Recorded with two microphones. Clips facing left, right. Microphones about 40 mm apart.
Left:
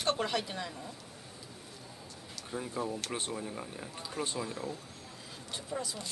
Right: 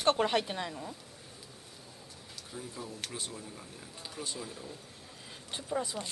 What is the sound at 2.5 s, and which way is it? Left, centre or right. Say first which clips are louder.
Speech: left 7 dB; left.